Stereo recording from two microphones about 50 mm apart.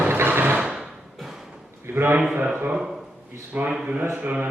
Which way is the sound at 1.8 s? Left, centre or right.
Right.